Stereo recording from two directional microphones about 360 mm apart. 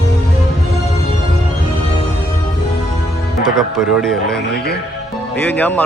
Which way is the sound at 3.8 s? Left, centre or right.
Centre.